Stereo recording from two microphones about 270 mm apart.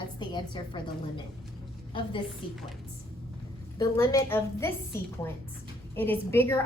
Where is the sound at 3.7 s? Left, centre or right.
Centre.